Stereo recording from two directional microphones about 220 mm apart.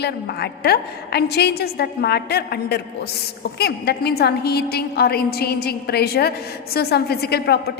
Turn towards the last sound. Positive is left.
turn(degrees=45)  # may be behind; listen again after turning